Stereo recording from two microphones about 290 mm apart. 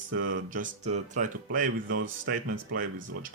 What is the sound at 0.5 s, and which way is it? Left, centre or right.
Speech, right.